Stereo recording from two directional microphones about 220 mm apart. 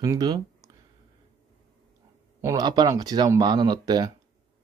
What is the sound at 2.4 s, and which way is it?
Speech, 15° right (ahead or behind).